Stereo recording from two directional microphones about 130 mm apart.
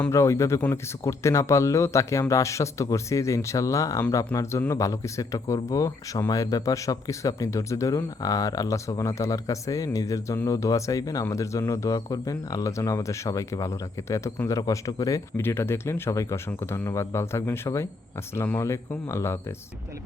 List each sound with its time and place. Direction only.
0.1 s speech: 20° left (ahead or behind)